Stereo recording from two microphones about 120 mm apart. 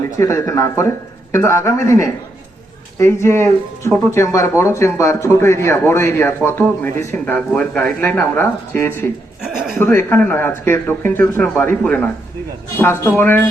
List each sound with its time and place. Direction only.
0.2 s speech: 25° left (ahead or behind)
9.4 s a sound: 5° right (ahead or behind)
9.7 s speech: 20° left (ahead or behind)